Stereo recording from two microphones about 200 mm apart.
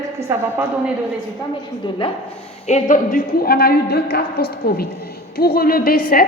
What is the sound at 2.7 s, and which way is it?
A woman's voice, 40° left (ahead or behind).